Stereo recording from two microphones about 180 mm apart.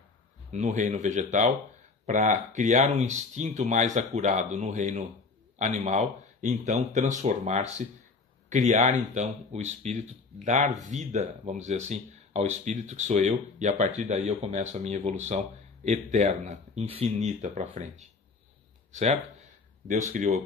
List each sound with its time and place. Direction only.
0.5 s speech: 40° right (ahead or behind)